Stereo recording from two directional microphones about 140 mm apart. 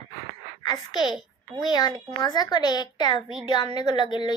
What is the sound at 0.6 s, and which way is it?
A woman's voice, 30° left (ahead or behind).